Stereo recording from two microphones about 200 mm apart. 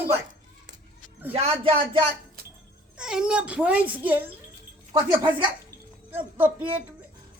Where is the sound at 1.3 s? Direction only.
30° right (ahead or behind).